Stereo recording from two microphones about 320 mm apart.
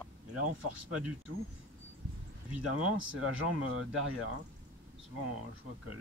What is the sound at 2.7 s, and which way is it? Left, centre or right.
Speech, right.